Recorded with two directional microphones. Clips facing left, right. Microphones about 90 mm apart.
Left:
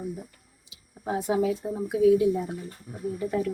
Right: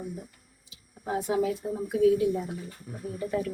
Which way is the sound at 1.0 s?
10° left (ahead or behind).